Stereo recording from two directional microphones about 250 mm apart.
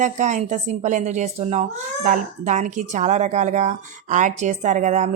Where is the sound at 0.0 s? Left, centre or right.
Right.